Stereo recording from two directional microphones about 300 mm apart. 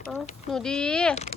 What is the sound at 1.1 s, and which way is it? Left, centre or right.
Speech, left.